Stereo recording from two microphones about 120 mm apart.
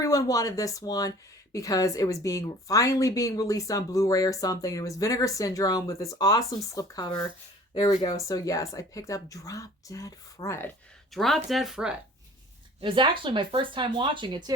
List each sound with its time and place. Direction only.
0.0 s a woman's voice: 30° left (ahead or behind)
11.1 s speech: centre (ahead or behind)
12.8 s speech: 45° right (ahead or behind)